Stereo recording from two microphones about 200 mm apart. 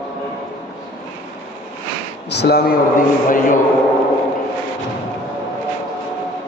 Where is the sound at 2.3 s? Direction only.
55° left (ahead or behind).